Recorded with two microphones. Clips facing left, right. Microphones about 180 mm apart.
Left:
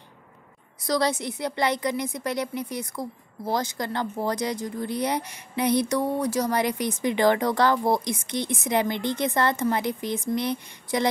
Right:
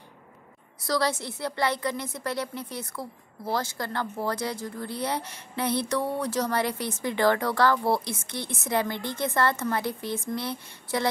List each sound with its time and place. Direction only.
0.8 s a woman's voice: 20° left (ahead or behind)